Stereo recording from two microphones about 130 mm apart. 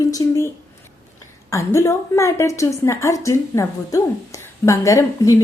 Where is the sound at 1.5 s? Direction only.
25° left (ahead or behind).